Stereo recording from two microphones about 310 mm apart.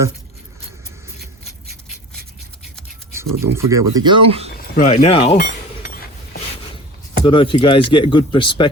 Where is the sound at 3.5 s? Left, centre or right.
Centre.